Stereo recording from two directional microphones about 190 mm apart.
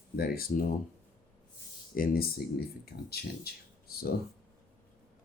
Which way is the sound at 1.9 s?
50° left (ahead or behind).